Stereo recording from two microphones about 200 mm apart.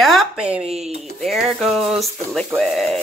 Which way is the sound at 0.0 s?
Centre (ahead or behind).